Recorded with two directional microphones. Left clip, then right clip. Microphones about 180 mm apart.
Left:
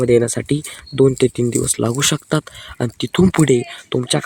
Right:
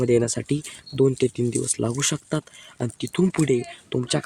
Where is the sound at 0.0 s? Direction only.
20° left (ahead or behind); by 3.6 s 35° left (ahead or behind).